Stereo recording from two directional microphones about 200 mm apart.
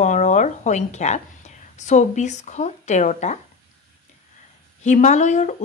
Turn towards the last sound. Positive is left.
turn(degrees=35)  # may be behind; listen again after turning